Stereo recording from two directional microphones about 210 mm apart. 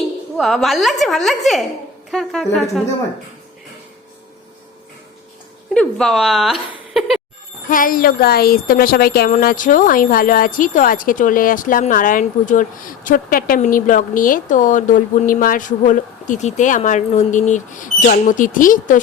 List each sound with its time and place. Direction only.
0.3 s a woman's voice: centre (ahead or behind)
5.7 s a woman's voice: 5° left (ahead or behind)
7.7 s speech: 40° left (ahead or behind)